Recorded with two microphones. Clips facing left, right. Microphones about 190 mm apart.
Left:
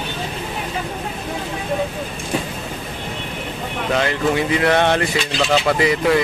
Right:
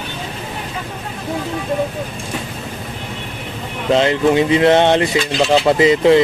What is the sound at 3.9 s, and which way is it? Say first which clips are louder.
Speech: right 6 dB; 25° right (ahead or behind).